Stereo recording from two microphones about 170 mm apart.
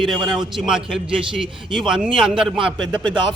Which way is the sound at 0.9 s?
30° right (ahead or behind).